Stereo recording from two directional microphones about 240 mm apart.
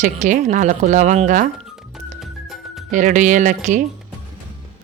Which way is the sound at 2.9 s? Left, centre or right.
Right.